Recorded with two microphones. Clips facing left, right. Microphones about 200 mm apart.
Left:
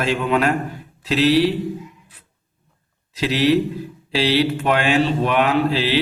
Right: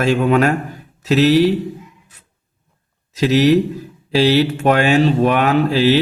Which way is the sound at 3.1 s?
45° right (ahead or behind).